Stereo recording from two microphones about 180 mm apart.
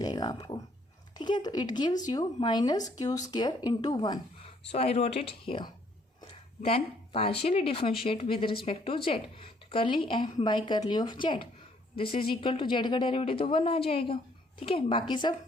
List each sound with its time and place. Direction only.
0.0 s speech: 20° left (ahead or behind)